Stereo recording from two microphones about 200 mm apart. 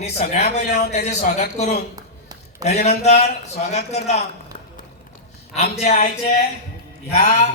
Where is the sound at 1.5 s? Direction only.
35° left (ahead or behind).